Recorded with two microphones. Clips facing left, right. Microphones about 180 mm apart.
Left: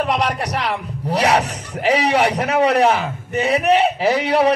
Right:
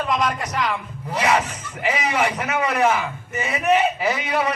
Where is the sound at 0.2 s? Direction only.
35° left (ahead or behind).